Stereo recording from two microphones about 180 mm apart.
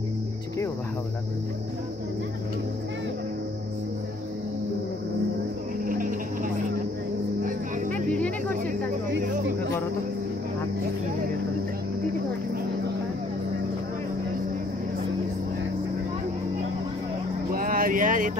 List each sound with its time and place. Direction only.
5.9 s cricket: 50° right (ahead or behind)
7.4 s music: 45° right (ahead or behind)
17.6 s a sound: 50° right (ahead or behind)